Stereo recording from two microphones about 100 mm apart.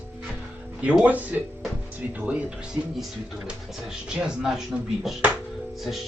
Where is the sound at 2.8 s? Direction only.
25° right (ahead or behind).